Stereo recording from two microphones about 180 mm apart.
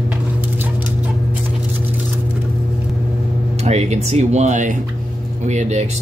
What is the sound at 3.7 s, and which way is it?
Speech, 40° right (ahead or behind).